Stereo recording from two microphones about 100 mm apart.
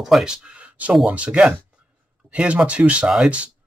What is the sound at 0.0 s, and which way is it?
Speech, 5° right (ahead or behind).